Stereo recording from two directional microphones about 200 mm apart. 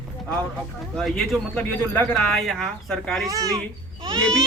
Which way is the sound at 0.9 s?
Centre (ahead or behind).